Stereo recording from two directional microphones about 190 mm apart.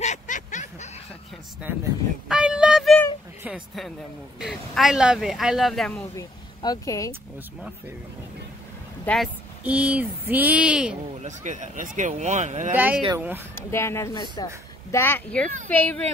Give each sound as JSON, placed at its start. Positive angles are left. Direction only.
{"t": 0.0, "sound": "snicker", "side_deg": 40}
{"t": 2.2, "sound": "child singing", "side_deg": -5}
{"t": 3.4, "sound": "a woman's voice", "side_deg": 0}
{"t": 5.9, "sound": "speech", "side_deg": 20}
{"t": 9.0, "sound": "speech", "side_deg": 5}
{"t": 9.6, "sound": "speech", "side_deg": -5}
{"t": 11.2, "sound": "speech", "side_deg": -40}
{"t": 12.7, "sound": "speech", "side_deg": -10}
{"t": 13.6, "sound": "speech", "side_deg": 15}